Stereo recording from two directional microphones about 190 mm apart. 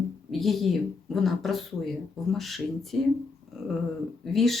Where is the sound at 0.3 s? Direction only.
Centre (ahead or behind).